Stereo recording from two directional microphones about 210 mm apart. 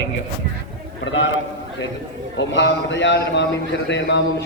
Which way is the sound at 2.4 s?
60° left (ahead or behind).